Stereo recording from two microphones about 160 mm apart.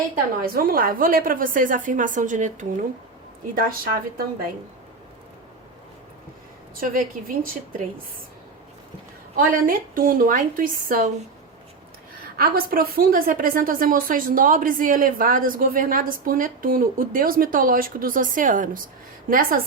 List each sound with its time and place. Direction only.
0.4 s a woman's voice: 65° right (ahead or behind)
6.7 s a woman's voice: 60° right (ahead or behind)
9.3 s a woman's voice: 60° right (ahead or behind)
12.2 s a woman's voice: 65° right (ahead or behind)